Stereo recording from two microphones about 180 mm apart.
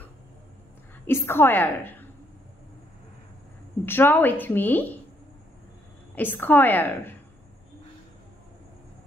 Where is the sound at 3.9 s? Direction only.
10° left (ahead or behind).